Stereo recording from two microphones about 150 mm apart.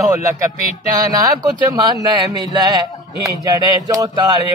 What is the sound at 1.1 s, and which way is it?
Speech, 25° right (ahead or behind).